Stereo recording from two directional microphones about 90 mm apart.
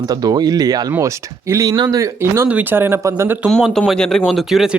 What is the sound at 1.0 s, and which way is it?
Speech, 30° right (ahead or behind).